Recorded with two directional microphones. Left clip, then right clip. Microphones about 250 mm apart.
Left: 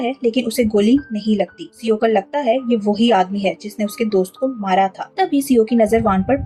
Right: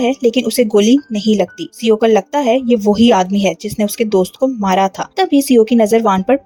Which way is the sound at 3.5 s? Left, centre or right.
Right.